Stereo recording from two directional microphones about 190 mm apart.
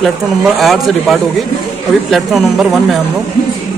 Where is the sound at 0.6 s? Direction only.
Centre (ahead or behind).